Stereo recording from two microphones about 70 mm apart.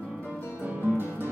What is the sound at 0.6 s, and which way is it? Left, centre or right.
Music, right.